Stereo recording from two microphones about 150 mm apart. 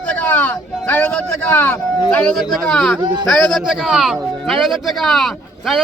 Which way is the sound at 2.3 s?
Centre (ahead or behind).